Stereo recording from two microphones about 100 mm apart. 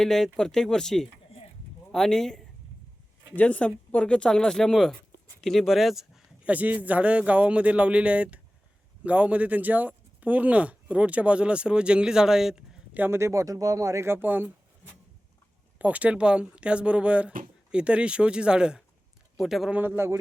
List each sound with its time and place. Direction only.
0.0 s speech: 5° left (ahead or behind)
6.5 s speech: 15° right (ahead or behind)
13.0 s speech: 25° right (ahead or behind)
15.8 s speech: 15° right (ahead or behind)
19.7 s speech: 20° right (ahead or behind)